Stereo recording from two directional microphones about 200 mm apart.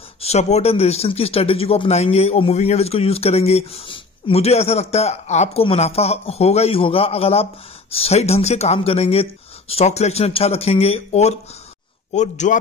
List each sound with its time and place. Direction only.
0.2 s speech: 35° left (ahead or behind)